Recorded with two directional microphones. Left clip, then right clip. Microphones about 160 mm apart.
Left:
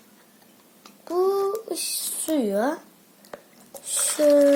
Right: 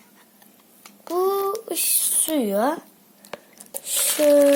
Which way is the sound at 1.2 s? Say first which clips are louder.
Even; 5° left (ahead or behind).